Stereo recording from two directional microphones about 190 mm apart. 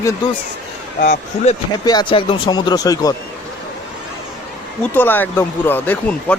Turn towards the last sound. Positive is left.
turn(degrees=10)  # may be behind; listen again after turning